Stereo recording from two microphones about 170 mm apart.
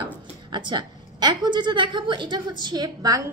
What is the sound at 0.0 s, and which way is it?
A woman's voice, 25° right (ahead or behind).